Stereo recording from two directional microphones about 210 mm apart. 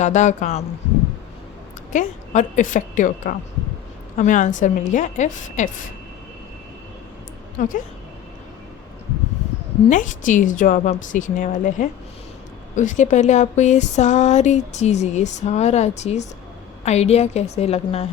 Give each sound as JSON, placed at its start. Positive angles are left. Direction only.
{"t": 0.0, "sound": "speech", "side_deg": 35}
{"t": 1.9, "sound": "speech", "side_deg": 35}
{"t": 7.6, "sound": "speech", "side_deg": 35}
{"t": 9.9, "sound": "speech", "side_deg": 35}